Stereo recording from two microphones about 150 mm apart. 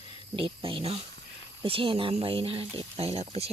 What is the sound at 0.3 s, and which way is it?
Speech, 35° right (ahead or behind).